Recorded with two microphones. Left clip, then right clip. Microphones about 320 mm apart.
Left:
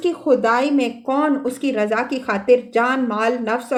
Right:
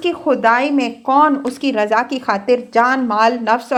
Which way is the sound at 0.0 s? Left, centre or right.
Centre.